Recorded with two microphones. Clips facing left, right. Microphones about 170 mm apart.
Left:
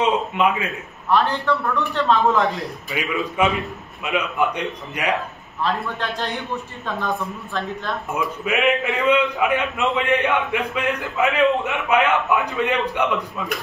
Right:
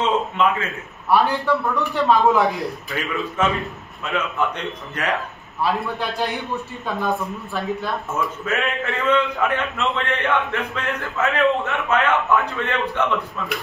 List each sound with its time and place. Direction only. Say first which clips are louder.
0.0 s a man's voice: left 1 dB; 15° left (ahead or behind)
1.1 s a man's voice: right 1 dB; 10° right (ahead or behind)
2.9 s a man's voice: left 1 dB; 15° left (ahead or behind)
5.6 s a man's voice: right 1 dB; 10° right (ahead or behind)
8.1 s a man's voice: left 3 dB; 15° left (ahead or behind)